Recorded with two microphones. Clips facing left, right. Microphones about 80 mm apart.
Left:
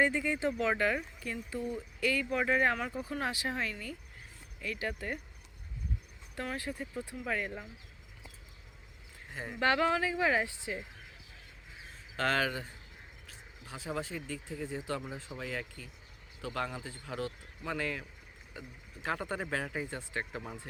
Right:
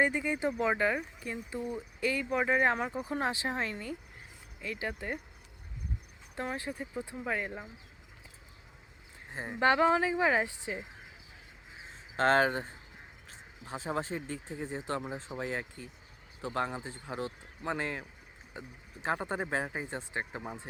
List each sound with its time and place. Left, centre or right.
0.0 s speech: centre
6.3 s speech: right
9.3 s speech: right
11.8 s a sound: right
13.2 s speech: right